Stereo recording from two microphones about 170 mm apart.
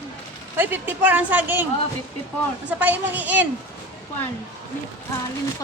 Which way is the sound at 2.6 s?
10° right (ahead or behind).